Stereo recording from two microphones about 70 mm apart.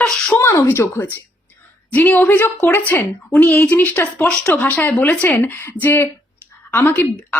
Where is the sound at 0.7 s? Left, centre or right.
Left.